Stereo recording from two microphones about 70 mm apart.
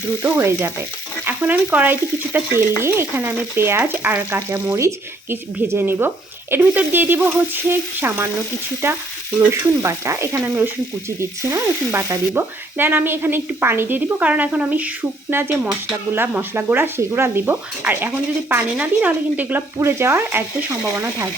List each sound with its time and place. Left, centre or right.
0.2 s stir: right
2.8 s frying: right
4.4 s speech: right
9.5 s sizzle: right
10.4 s frying: right
11.2 s sizzle: right
12.3 s speech: right
14.2 s frying: right
15.3 s speech: right
18.8 s frying: right
19.8 s speech: right